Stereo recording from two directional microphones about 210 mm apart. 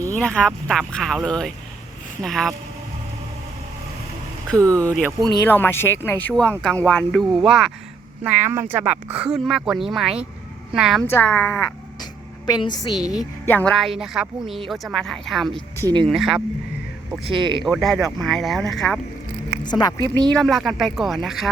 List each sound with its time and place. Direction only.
0.1 s speech: 5° left (ahead or behind)
4.5 s speech: 15° right (ahead or behind)
5.5 s a woman's voice: 10° left (ahead or behind)
11.0 s a woman's voice: 10° left (ahead or behind)
12.5 s a woman's voice: 20° left (ahead or behind)
12.9 s speech: centre (ahead or behind)
13.4 s a woman's voice: 10° left (ahead or behind)
17.2 s speech: 20° right (ahead or behind)
17.7 s speech: centre (ahead or behind)
19.6 s a woman's voice: 20° left (ahead or behind)
20.3 s speech: centre (ahead or behind)